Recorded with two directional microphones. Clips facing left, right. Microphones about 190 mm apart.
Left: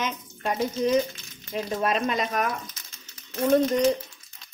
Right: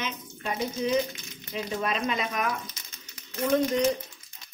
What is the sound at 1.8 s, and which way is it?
Speech, 45° left (ahead or behind).